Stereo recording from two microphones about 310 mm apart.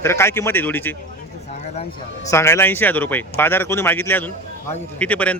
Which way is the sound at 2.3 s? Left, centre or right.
Centre.